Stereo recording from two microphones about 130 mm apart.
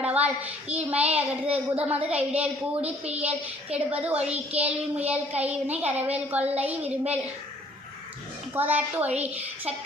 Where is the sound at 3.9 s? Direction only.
10° right (ahead or behind).